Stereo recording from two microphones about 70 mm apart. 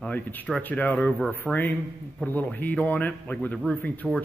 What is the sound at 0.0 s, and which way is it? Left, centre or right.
Speech, left.